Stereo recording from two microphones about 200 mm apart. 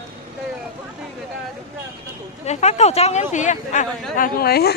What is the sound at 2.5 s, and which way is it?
Speech, 35° left (ahead or behind).